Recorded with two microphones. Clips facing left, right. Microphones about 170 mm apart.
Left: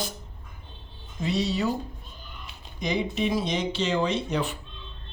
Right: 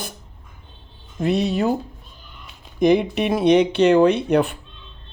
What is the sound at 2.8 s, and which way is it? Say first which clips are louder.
Speech: right 10 dB; 55° right (ahead or behind).